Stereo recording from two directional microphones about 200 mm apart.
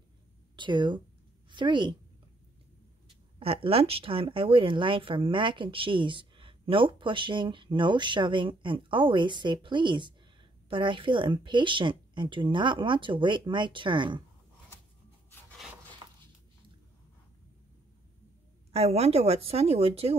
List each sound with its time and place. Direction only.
0.6 s a woman's voice: 25° right (ahead or behind)
3.3 s speech: 30° right (ahead or behind)
16.0 s a sound: 20° right (ahead or behind)
18.7 s a woman's voice: 30° right (ahead or behind)